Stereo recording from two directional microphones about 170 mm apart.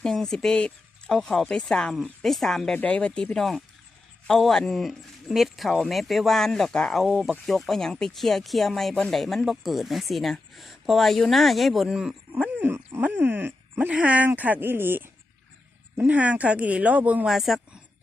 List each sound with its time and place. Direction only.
0.0 s speech: 5° left (ahead or behind)